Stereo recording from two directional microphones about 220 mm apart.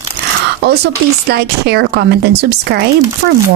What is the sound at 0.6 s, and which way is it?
Speech, 45° right (ahead or behind).